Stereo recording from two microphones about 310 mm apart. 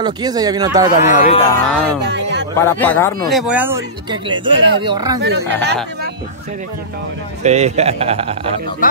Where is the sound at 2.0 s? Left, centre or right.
Right.